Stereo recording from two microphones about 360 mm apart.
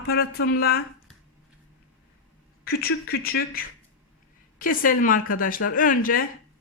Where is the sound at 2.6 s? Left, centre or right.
Left.